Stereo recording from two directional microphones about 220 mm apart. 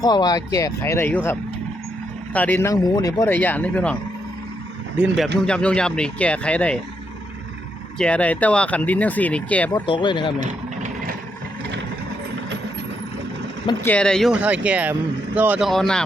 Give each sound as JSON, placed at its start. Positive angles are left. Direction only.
{"t": 0.0, "sound": "speech", "side_deg": 20}
{"t": 4.9, "sound": "speech", "side_deg": -5}
{"t": 7.9, "sound": "speech", "side_deg": 5}
{"t": 9.7, "sound": "speech", "side_deg": 20}
{"t": 10.4, "sound": "vehicle", "side_deg": -35}
{"t": 13.8, "sound": "speech", "side_deg": 5}